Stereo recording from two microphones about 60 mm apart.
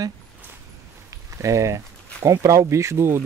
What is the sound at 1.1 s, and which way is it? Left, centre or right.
Speech, right.